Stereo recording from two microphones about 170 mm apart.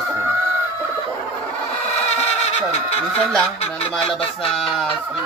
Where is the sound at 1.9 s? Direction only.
40° left (ahead or behind).